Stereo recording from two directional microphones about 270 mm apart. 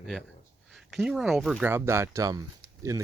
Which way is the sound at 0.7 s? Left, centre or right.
Centre.